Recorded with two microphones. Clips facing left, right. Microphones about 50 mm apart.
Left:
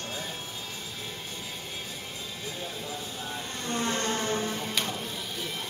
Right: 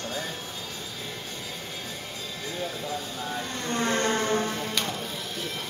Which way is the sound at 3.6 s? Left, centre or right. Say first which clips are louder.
Right 4 dB; right.